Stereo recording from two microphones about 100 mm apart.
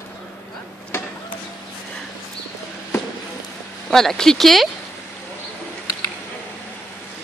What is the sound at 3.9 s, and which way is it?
Speech, 5° left (ahead or behind).